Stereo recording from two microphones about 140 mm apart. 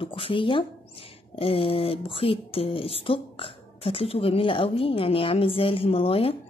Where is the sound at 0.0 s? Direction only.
40° left (ahead or behind).